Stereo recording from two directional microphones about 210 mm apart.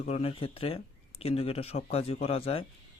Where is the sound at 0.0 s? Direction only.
30° left (ahead or behind).